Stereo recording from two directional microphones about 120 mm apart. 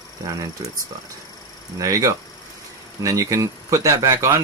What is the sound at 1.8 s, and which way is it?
Speech, 25° right (ahead or behind).